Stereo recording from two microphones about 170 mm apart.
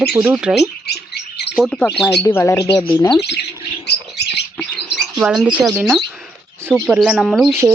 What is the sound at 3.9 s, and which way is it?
Bird, 80° left.